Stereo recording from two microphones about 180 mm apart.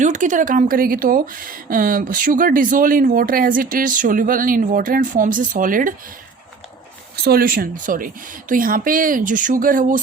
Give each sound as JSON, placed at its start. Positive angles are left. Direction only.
{"t": 0.0, "sound": "speech", "side_deg": -45}
{"t": 7.2, "sound": "speech", "side_deg": -60}